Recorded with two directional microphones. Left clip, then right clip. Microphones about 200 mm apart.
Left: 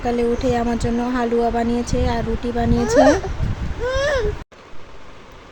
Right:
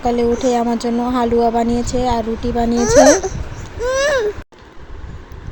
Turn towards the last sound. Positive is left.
turn(degrees=-55)  # may be behind; listen again after turning